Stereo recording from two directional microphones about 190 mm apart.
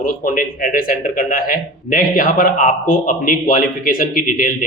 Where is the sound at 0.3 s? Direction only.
45° left (ahead or behind).